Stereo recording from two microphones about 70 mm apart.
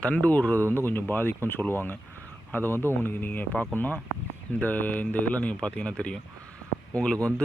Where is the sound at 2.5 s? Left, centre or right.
Left.